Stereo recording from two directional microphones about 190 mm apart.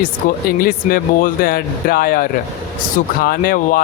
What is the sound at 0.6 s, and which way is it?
Speech, 50° left (ahead or behind).